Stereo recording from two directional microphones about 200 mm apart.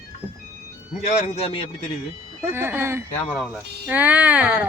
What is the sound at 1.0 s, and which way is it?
Speech, 30° left (ahead or behind).